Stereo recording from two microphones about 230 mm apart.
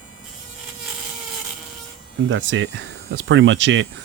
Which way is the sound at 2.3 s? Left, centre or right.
Right.